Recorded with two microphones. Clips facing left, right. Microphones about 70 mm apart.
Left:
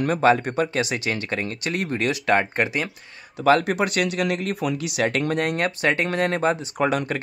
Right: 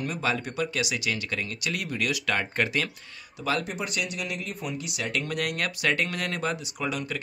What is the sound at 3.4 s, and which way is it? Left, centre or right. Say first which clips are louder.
Speech: left 11 dB; left.